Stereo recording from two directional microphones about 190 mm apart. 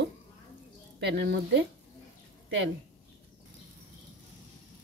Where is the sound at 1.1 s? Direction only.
60° right (ahead or behind).